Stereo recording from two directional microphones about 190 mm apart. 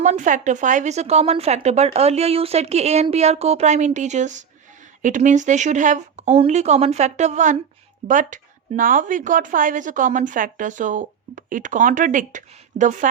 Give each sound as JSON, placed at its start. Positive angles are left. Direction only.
{"t": 0.0, "sound": "speech", "side_deg": -40}